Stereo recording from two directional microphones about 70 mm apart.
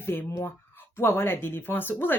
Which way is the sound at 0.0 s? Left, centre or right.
Left.